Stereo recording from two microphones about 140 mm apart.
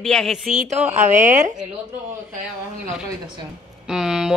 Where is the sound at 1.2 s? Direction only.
60° right (ahead or behind).